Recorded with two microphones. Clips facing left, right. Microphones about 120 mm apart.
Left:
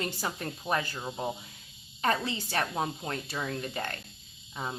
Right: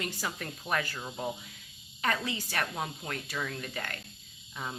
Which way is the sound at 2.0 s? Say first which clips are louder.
Left 3 dB; 30° left (ahead or behind).